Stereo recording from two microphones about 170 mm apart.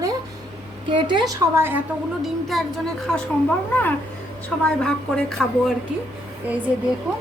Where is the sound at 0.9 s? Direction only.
30° right (ahead or behind).